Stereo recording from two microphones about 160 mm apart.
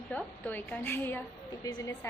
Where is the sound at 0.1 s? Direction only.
10° left (ahead or behind).